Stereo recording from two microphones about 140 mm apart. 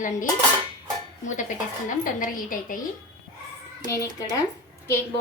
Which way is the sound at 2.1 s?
75° left (ahead or behind).